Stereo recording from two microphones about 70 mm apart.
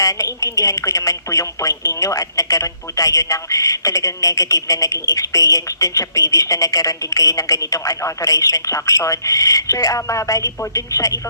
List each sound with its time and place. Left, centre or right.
0.0 s a woman's voice: left